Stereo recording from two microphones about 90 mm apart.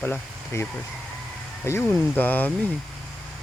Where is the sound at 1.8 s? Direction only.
20° left (ahead or behind).